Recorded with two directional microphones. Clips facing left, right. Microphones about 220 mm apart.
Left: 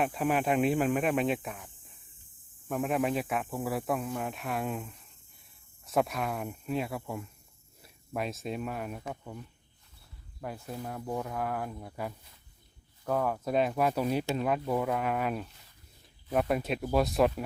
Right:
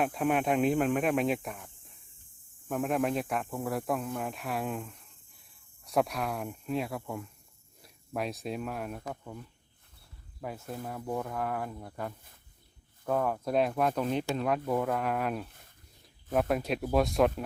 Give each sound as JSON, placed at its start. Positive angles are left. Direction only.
{"t": 0.0, "sound": "speech", "side_deg": 0}
{"t": 10.4, "sound": "speech", "side_deg": 0}
{"t": 15.4, "sound": "a sound", "side_deg": -55}
{"t": 16.3, "sound": "speech", "side_deg": 0}